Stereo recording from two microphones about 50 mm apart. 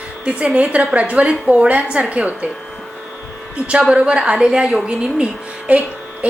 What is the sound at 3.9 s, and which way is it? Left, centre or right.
A woman's voice, right.